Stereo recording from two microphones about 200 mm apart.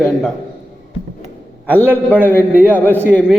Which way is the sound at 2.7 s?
10° left (ahead or behind).